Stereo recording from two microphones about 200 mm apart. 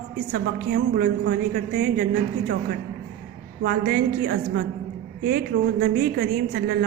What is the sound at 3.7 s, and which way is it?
Speech, 50° right (ahead or behind).